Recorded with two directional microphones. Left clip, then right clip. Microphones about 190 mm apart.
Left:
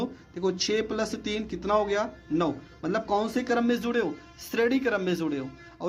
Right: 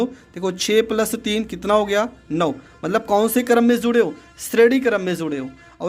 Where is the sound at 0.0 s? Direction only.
25° right (ahead or behind).